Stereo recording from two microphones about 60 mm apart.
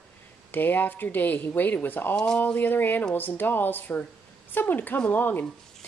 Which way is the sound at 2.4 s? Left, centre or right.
Left.